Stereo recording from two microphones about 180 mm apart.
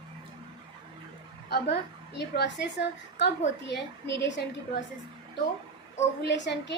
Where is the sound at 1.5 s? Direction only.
65° left (ahead or behind).